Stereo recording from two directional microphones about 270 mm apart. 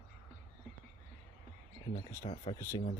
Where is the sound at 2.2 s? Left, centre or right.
Centre.